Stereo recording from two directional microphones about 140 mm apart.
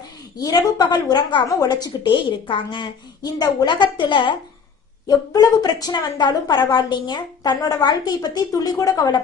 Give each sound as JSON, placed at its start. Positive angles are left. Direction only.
{"t": 0.3, "sound": "a woman's voice", "side_deg": 25}